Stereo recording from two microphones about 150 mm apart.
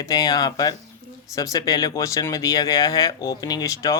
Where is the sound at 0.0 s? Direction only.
25° left (ahead or behind).